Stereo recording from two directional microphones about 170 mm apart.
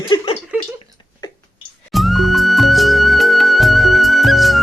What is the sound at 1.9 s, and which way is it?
Music, centre (ahead or behind).